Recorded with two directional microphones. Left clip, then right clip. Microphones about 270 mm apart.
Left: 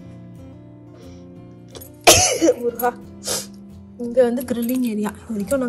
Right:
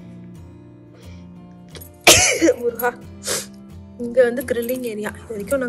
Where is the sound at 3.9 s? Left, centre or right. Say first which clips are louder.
Right 1 dB; centre.